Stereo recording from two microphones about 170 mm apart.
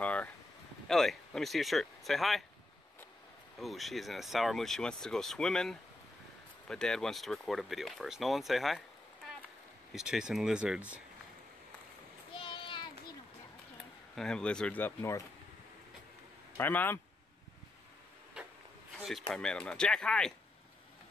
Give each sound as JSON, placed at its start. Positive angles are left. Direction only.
{"t": 0.0, "sound": "a sound", "side_deg": 10}
{"t": 0.8, "sound": "speech", "side_deg": 5}
{"t": 3.5, "sound": "speech", "side_deg": 0}
{"t": 9.9, "sound": "speech", "side_deg": -5}
{"t": 12.4, "sound": "a sound", "side_deg": 30}
{"t": 14.1, "sound": "speech", "side_deg": 5}
{"t": 16.5, "sound": "speech", "side_deg": 10}
{"t": 18.9, "sound": "a sound", "side_deg": 0}
{"t": 19.3, "sound": "speech", "side_deg": 5}